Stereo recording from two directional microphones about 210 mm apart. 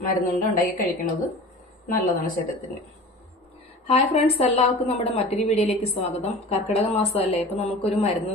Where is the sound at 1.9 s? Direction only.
40° left (ahead or behind).